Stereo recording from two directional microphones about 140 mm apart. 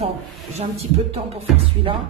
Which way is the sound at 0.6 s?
45° right (ahead or behind).